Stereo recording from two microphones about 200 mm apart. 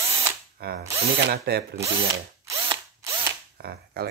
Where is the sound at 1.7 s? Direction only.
15° right (ahead or behind).